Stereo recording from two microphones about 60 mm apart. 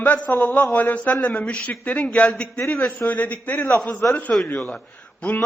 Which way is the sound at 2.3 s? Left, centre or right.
Centre.